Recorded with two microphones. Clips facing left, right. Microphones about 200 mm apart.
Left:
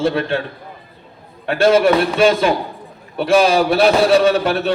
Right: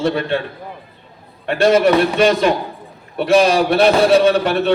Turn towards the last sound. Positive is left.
turn(degrees=0)  # may be behind; listen again after turning